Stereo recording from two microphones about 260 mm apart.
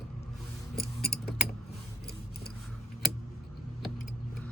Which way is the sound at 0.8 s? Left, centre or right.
Left.